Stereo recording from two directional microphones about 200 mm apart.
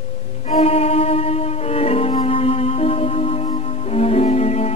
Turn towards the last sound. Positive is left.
turn(degrees=35)  # may be behind; listen again after turning